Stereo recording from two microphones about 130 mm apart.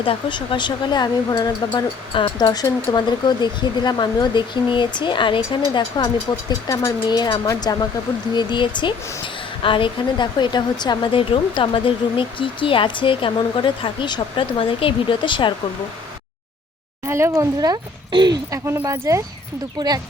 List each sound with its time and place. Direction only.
0.0 s a woman's voice: 40° left (ahead or behind)
17.1 s speech: 20° right (ahead or behind)
18.6 s speech: 20° right (ahead or behind)
19.8 s speech: 35° right (ahead or behind)